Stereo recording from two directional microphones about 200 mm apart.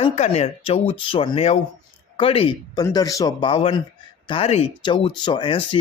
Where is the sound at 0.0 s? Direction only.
30° left (ahead or behind).